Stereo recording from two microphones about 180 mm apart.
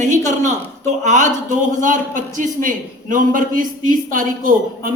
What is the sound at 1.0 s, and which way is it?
A man's voice, 40° right (ahead or behind).